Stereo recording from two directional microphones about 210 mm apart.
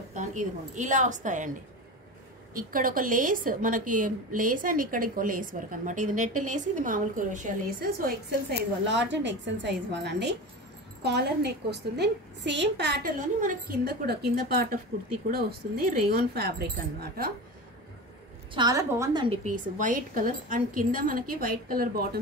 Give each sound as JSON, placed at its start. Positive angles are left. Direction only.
{"t": 0.1, "sound": "speech", "side_deg": -35}
{"t": 2.5, "sound": "a woman's voice", "side_deg": -40}
{"t": 13.4, "sound": "a woman's voice", "side_deg": -40}
{"t": 18.5, "sound": "a woman's voice", "side_deg": -20}
{"t": 19.4, "sound": "a woman's voice", "side_deg": -40}